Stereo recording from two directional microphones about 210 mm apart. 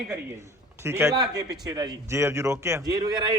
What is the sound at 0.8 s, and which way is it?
A man's voice, 10° right (ahead or behind).